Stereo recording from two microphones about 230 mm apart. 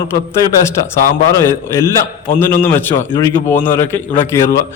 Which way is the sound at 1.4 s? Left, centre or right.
Centre.